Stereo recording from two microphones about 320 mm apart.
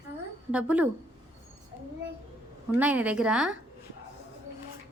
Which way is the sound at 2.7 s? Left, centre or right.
Centre.